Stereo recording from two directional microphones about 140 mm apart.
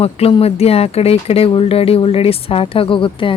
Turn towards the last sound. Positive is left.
turn(degrees=40)  # may be behind; listen again after turning